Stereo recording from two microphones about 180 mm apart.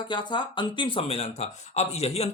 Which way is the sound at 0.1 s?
25° left (ahead or behind).